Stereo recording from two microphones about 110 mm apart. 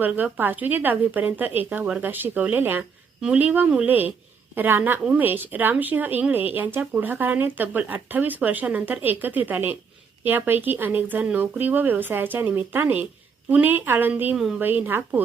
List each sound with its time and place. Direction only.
0.0 s a woman's voice: 15° right (ahead or behind)